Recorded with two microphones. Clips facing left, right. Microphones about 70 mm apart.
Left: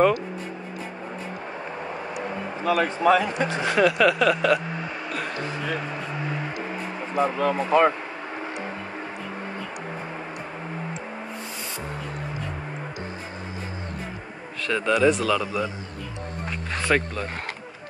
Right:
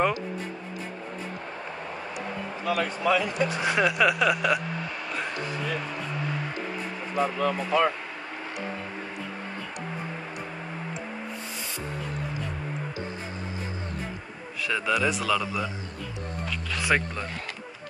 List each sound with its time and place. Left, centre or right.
2.6 s speech: left
3.6 s a sound: centre
7.2 s speech: left
14.6 s a man's voice: centre
16.9 s a man's voice: centre